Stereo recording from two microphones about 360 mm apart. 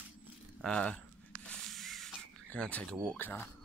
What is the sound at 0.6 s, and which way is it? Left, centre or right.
Speech, centre.